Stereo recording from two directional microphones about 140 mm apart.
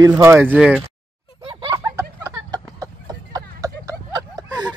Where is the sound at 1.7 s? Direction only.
20° right (ahead or behind).